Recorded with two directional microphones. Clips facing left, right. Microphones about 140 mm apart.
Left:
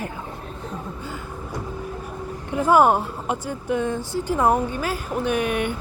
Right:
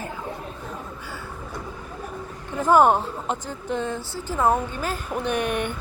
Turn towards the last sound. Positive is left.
turn(degrees=5)  # may be behind; listen again after turning